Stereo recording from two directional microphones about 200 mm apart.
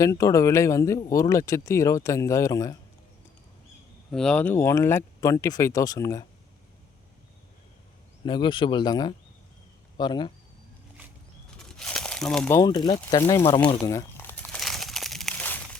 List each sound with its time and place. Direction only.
0.0 s speech: 15° left (ahead or behind)
4.1 s speech: 5° left (ahead or behind)
8.2 s speech: 25° left (ahead or behind)
11.6 s crumpling: 5° left (ahead or behind)
12.5 s speech: 20° left (ahead or behind)
13.7 s crumpling: 15° left (ahead or behind)